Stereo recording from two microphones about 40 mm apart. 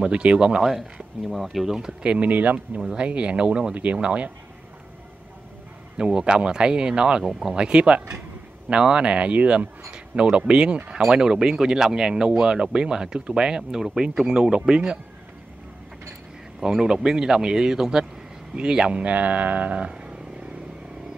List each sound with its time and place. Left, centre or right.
0.1 s speech: right
0.6 s speech: centre
2.1 s speech: right
3.0 s speech: right
3.7 s speech: right
5.9 s speech: right
16.5 s speech: centre; by 19.9 s right
19.9 s vehicle: right